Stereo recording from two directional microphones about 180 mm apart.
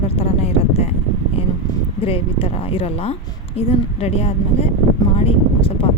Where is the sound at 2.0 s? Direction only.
30° left (ahead or behind).